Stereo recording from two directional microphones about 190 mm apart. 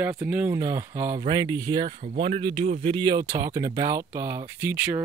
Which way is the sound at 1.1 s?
25° right (ahead or behind).